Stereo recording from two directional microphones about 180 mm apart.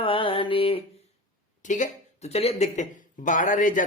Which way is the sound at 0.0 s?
30° left (ahead or behind).